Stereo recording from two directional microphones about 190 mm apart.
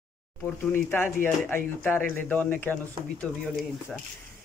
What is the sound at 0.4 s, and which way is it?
Speech, 10° left (ahead or behind).